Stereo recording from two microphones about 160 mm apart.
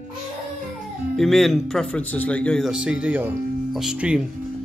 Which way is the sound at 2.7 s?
5° right (ahead or behind).